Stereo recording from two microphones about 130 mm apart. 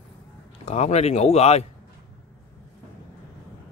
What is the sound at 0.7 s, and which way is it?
Speech, 55° left (ahead or behind).